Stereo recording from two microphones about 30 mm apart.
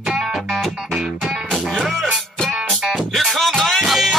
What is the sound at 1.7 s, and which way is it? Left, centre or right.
Music, centre.